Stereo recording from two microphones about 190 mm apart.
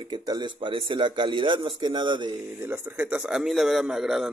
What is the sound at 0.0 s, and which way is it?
Speech, 20° right (ahead or behind).